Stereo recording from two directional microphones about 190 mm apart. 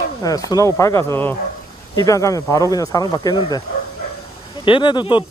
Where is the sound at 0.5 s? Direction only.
15° left (ahead or behind).